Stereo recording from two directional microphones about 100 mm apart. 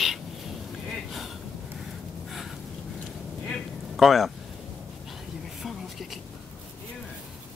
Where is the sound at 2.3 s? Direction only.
Centre (ahead or behind).